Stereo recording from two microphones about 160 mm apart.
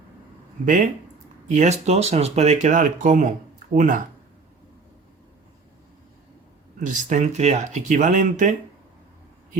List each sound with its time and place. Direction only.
0.6 s speech: 55° right (ahead or behind)
6.7 s speech: 55° right (ahead or behind)